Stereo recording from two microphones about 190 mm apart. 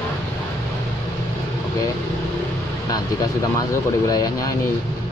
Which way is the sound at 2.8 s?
20° left (ahead or behind).